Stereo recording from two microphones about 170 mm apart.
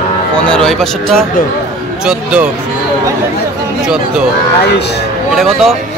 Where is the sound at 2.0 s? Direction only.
5° right (ahead or behind).